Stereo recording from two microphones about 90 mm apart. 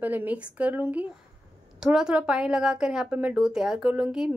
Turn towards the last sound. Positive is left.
turn(degrees=-10)  # may be behind; listen again after turning